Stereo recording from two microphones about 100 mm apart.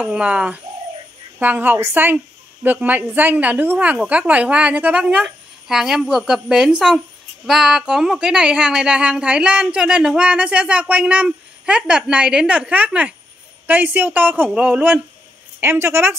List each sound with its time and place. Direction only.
0.0 s a woman's voice: 10° right (ahead or behind)
15.6 s a woman's voice: 25° right (ahead or behind)